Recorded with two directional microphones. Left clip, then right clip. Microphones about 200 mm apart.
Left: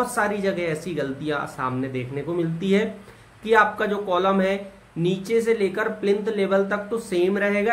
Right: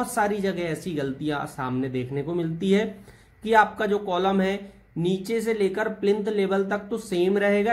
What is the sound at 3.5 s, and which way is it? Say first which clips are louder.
A man's voice: left 1 dB; 35° right (ahead or behind).